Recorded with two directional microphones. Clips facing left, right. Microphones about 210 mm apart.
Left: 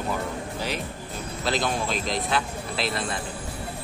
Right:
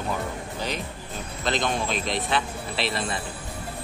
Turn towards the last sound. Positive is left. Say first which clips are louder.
# even
turn(degrees=0)  # may be behind; listen again after turning